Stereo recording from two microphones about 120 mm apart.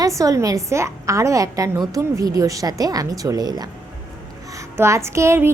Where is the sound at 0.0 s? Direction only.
25° right (ahead or behind).